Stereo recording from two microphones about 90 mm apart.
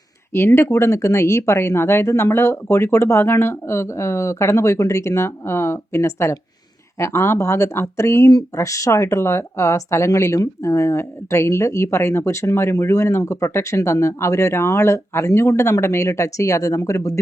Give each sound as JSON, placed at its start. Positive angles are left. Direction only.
{"t": 0.3, "sound": "speech", "side_deg": 25}